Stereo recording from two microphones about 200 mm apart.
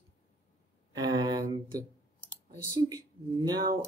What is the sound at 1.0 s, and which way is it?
Speech, 20° right (ahead or behind).